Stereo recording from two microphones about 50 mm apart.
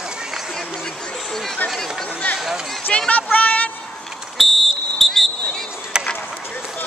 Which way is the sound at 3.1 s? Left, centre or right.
Left.